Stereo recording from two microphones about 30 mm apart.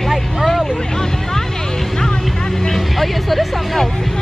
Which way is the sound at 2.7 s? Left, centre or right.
Centre.